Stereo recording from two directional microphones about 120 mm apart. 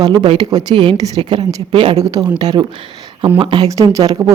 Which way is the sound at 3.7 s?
25° right (ahead or behind).